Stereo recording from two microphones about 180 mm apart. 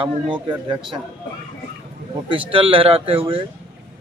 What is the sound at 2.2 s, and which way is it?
Speech, 30° right (ahead or behind).